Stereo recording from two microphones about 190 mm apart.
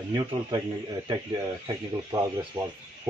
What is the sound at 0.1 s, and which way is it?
Speech, 20° right (ahead or behind).